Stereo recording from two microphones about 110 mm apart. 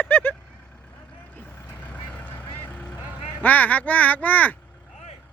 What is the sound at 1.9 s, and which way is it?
Vehicle, 15° left (ahead or behind).